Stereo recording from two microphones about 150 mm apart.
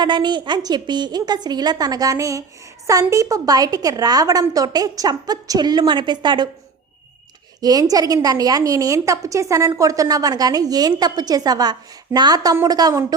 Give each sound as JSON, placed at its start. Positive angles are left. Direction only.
{"t": 0.0, "sound": "a woman's voice", "side_deg": -30}
{"t": 7.6, "sound": "a woman's voice", "side_deg": -25}